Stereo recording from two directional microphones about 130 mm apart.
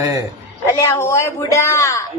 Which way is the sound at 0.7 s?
20° left (ahead or behind).